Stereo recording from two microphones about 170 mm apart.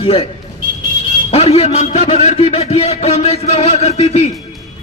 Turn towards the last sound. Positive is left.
turn(degrees=35)  # may be behind; listen again after turning